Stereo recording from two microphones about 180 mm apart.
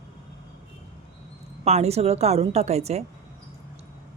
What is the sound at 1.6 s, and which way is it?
Speech, 35° right (ahead or behind).